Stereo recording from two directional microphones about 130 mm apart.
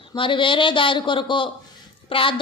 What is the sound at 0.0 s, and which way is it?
A woman's voice, 40° left (ahead or behind).